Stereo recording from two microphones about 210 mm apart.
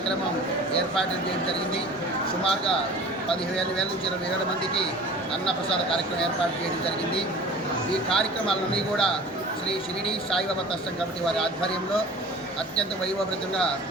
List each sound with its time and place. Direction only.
8.1 s speech: 5° left (ahead or behind)